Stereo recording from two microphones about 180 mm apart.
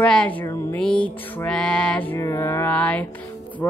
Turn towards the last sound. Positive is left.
turn(degrees=10)  # may be behind; listen again after turning